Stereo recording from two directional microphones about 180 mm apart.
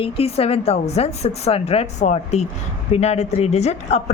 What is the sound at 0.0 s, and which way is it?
A woman's voice, 35° left (ahead or behind).